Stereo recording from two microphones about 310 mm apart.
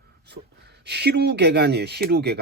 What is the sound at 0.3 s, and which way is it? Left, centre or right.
Speech, right.